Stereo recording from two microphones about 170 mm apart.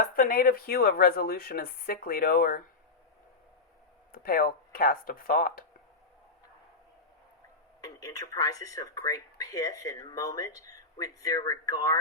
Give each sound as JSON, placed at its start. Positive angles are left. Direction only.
{"t": 0.0, "sound": "speech", "side_deg": 55}
{"t": 4.1, "sound": "speech", "side_deg": 55}
{"t": 7.8, "sound": "speech", "side_deg": 20}